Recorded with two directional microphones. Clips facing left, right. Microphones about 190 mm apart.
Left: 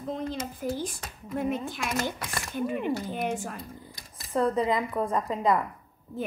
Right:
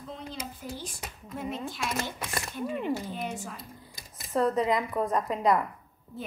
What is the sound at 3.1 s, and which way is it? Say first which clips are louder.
Speech: left 5 dB; 55° left (ahead or behind).